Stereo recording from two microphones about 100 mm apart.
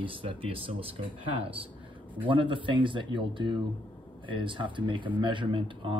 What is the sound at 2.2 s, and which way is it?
Speech, 55° right (ahead or behind).